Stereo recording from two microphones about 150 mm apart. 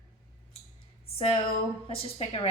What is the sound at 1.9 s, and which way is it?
Speech, 40° left (ahead or behind).